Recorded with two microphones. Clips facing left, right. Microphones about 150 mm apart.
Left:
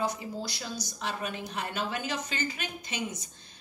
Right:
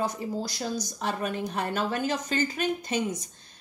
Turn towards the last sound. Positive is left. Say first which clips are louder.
# right 8 dB
turn(degrees=-45)  # may be behind; listen again after turning